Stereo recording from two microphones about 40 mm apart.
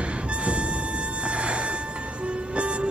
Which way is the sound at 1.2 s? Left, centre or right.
Right.